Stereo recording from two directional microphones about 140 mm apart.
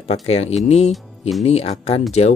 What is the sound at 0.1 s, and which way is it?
Speech, 50° left (ahead or behind).